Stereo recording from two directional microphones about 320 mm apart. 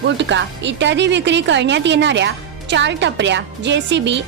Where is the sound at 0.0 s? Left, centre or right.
Right.